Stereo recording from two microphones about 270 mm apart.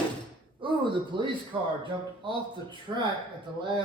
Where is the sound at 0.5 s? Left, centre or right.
Centre.